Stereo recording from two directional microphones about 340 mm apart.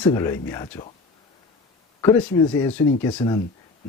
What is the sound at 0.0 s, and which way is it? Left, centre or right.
Speech, centre.